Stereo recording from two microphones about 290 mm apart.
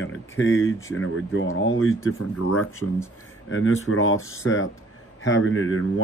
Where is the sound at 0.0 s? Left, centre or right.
Left.